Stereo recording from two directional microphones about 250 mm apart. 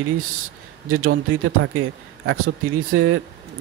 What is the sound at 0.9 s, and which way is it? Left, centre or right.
Speech, right.